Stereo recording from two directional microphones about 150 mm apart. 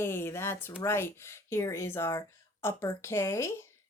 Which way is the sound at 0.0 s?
15° left (ahead or behind).